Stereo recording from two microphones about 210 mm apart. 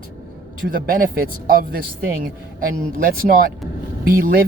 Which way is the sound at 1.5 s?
45° right (ahead or behind).